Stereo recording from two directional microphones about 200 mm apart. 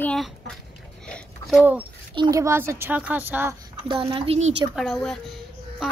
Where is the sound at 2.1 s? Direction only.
20° right (ahead or behind).